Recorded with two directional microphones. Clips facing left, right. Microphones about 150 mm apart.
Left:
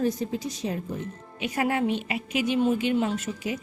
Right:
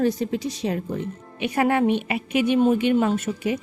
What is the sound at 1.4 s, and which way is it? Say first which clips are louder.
A woman's voice: right 5 dB; 65° right (ahead or behind).